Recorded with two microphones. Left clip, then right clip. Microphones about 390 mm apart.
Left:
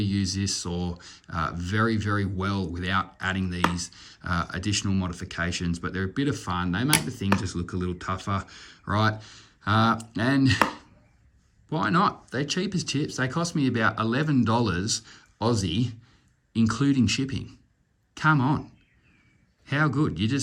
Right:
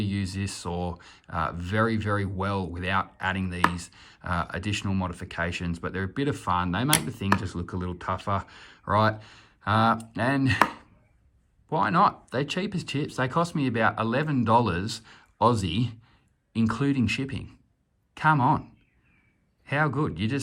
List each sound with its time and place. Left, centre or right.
0.0 s speech: centre